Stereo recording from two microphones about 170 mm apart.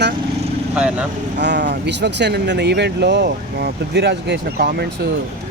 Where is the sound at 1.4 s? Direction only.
90° right.